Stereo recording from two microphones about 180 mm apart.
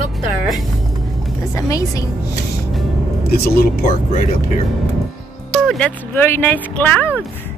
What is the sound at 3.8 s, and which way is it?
Speech, 35° left (ahead or behind).